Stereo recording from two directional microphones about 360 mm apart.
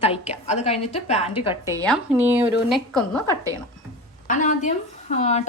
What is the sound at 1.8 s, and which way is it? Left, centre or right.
A woman's voice, centre.